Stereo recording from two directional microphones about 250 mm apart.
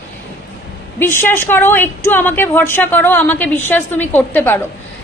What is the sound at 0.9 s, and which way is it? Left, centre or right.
A woman's voice, centre.